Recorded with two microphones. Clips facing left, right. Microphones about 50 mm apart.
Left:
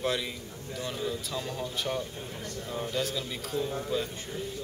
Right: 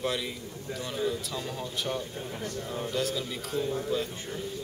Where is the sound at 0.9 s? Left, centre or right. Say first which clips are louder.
Right 4 dB; centre.